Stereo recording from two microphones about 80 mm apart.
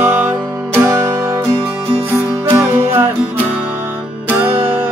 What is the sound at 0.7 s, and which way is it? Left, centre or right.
Music, right.